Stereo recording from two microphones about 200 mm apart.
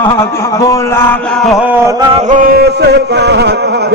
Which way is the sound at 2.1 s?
40° right (ahead or behind).